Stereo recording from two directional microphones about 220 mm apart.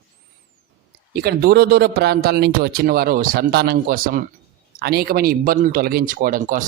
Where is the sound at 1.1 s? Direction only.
45° right (ahead or behind).